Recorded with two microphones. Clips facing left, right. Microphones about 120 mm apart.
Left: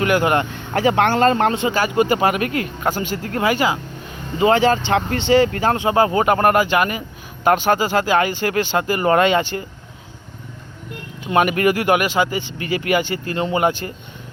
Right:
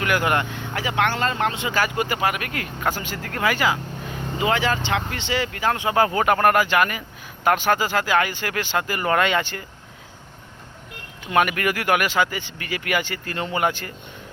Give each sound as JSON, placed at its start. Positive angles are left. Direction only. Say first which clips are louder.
{"t": 0.0, "sound": "speech", "louder": "left 5 dB", "side_deg": 25}
{"t": 0.7, "sound": "speech", "louder": "left 7 dB", "side_deg": 40}
{"t": 1.7, "sound": "speech", "louder": "left 6 dB", "side_deg": 25}
{"t": 4.4, "sound": "speech", "louder": "left 7 dB", "side_deg": 35}
{"t": 5.7, "sound": "speech", "louder": "left 1 dB", "side_deg": 25}
{"t": 11.3, "sound": "speech", "louder": "left 4 dB", "side_deg": 25}